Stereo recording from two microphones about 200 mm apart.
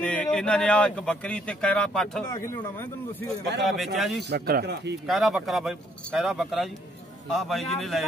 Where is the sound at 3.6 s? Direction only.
Centre (ahead or behind).